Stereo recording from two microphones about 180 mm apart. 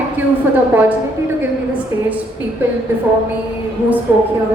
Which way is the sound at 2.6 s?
10° right (ahead or behind).